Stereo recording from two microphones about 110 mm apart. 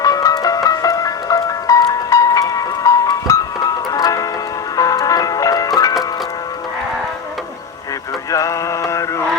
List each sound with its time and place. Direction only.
0.0 s music: 35° left (ahead or behind)
4.8 s ice cream truck: 35° left (ahead or behind)
8.3 s mantra: 30° left (ahead or behind)